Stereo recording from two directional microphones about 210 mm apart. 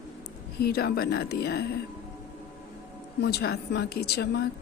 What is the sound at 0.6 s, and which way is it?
A woman's voice, 50° left (ahead or behind).